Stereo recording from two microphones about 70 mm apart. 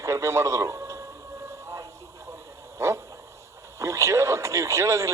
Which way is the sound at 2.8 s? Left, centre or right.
Right.